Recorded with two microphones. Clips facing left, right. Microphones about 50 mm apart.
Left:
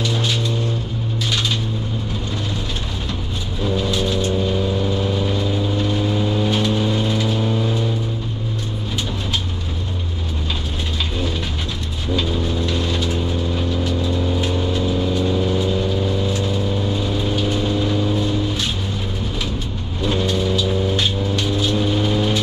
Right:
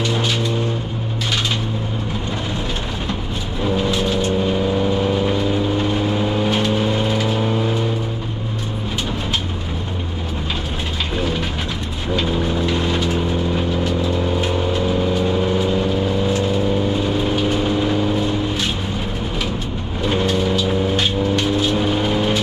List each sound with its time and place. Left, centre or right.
0.0 s vehicle: right
3.7 s vehicle: right
12.2 s vehicle: right
14.4 s vehicle: right
16.9 s vehicle: right
20.1 s vehicle: right